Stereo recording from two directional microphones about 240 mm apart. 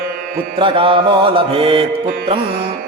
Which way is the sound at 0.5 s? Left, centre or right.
Right.